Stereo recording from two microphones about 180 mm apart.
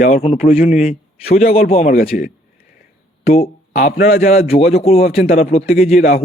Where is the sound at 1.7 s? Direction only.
40° left (ahead or behind).